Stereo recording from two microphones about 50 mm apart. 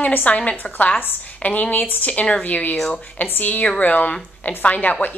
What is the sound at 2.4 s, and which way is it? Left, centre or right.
A woman's voice, left.